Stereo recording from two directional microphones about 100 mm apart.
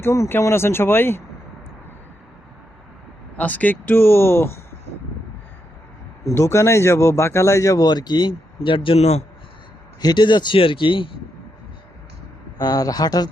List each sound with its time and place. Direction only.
0.0 s speech: 25° left (ahead or behind)
3.3 s speech: 15° left (ahead or behind)
6.2 s speech: 25° left (ahead or behind); by 9.2 s 90° left
10.0 s speech: 45° left (ahead or behind)
12.5 s speech: 40° left (ahead or behind)